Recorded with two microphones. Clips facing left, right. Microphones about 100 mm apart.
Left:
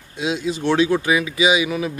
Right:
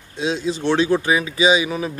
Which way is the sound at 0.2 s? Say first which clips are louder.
Even; 35° right (ahead or behind).